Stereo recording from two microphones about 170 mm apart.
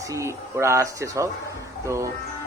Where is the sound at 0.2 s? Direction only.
15° right (ahead or behind).